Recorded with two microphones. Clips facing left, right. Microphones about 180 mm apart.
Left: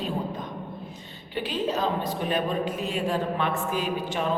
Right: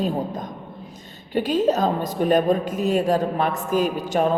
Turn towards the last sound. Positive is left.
turn(degrees=-45)  # may be behind; listen again after turning